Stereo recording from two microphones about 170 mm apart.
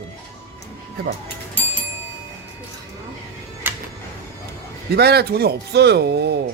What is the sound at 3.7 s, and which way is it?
Music, 10° right (ahead or behind).